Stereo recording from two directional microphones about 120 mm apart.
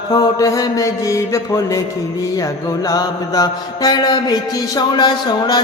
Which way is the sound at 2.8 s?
30° left (ahead or behind).